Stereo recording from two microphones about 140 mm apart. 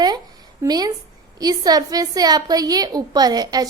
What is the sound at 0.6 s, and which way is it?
A woman's voice, 30° right (ahead or behind).